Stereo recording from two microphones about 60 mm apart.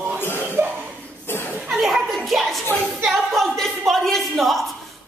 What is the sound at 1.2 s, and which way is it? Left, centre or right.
Chuckle, left.